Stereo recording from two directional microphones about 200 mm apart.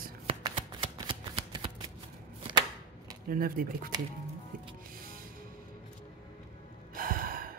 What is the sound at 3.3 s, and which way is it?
Speech, 45° right (ahead or behind).